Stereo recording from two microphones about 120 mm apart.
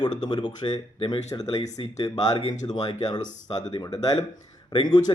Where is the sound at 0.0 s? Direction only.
40° left (ahead or behind).